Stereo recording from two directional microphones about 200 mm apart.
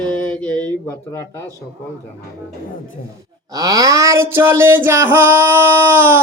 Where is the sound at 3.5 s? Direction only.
15° right (ahead or behind).